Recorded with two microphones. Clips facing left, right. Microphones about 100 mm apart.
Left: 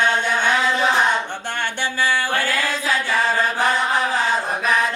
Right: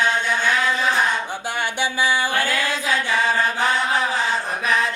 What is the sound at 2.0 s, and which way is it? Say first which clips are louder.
Music: left 1 dB; 15° right (ahead or behind).